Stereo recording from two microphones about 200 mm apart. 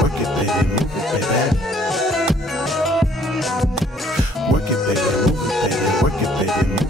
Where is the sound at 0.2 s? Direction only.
Centre (ahead or behind).